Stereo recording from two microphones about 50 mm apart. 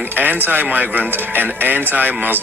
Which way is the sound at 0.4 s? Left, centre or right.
Right.